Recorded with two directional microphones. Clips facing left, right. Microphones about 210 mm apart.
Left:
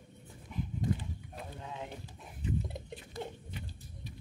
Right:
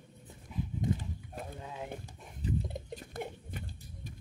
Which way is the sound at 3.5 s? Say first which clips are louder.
Right 1 dB; 50° right (ahead or behind).